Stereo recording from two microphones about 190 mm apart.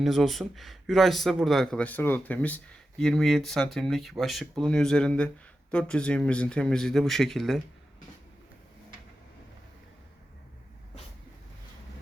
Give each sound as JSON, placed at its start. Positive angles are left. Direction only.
{"t": 0.0, "sound": "speech", "side_deg": 0}